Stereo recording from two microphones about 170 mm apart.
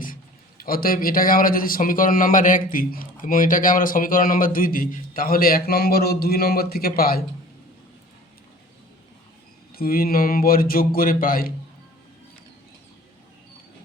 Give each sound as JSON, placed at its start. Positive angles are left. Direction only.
{"t": 0.6, "sound": "a man's voice", "side_deg": 60}
{"t": 9.7, "sound": "a man's voice", "side_deg": 60}